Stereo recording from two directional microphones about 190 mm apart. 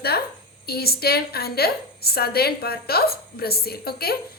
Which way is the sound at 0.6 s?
55° left (ahead or behind).